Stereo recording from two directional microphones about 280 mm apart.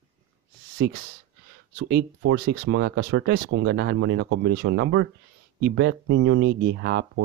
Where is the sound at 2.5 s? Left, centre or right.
Right.